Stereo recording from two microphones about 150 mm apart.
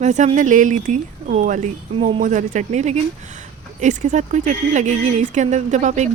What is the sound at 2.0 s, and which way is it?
Speech, 40° right (ahead or behind).